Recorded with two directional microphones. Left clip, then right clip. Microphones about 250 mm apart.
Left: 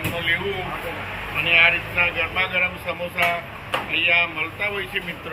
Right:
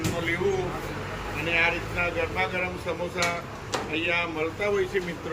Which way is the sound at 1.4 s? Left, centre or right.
Centre.